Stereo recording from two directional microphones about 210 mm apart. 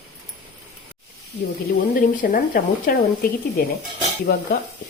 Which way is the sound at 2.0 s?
40° left (ahead or behind).